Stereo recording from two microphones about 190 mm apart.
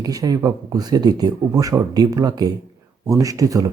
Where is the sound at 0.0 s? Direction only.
20° right (ahead or behind).